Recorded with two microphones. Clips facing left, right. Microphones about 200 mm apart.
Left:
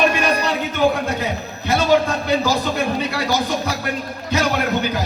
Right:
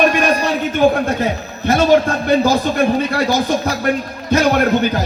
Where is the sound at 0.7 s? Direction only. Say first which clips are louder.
Right 5 dB; 50° right (ahead or behind).